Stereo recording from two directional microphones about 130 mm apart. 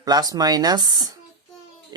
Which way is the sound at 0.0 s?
30° right (ahead or behind).